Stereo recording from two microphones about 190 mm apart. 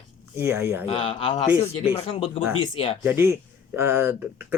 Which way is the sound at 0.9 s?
25° left (ahead or behind).